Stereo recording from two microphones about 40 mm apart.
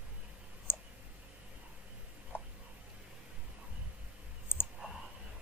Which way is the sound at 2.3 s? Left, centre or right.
Left.